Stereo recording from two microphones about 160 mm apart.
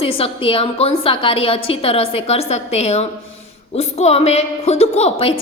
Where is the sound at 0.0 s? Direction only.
35° left (ahead or behind).